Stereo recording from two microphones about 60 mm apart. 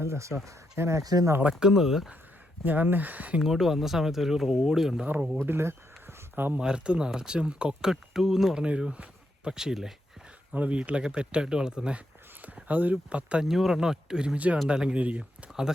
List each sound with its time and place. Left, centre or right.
0.0 s speech: right
1.5 s speech: centre
2.6 s speech: right
3.4 s speech: centre
5.5 s a sound: right
6.6 s speech: centre
8.6 s speech: centre
10.5 s speech: right
13.4 s speech: centre
14.3 s speech: right